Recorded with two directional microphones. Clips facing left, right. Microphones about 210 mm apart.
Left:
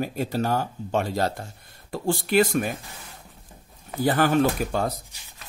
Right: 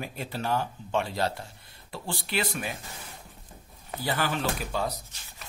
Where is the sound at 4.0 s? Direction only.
50° left (ahead or behind).